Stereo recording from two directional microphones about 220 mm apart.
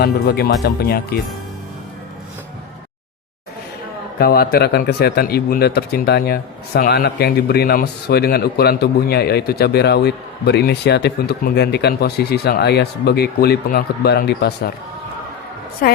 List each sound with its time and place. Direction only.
0.0 s speech: 45° left (ahead or behind)
4.2 s speech: 45° left (ahead or behind)
15.8 s a woman's voice: 40° left (ahead or behind)